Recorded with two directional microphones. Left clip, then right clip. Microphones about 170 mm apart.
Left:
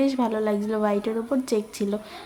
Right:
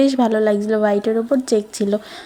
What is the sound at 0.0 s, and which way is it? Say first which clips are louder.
A woman's voice: right 8 dB; 35° right (ahead or behind).